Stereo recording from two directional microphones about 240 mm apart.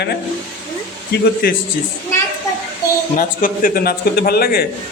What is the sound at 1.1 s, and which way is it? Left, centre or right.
Speech, left.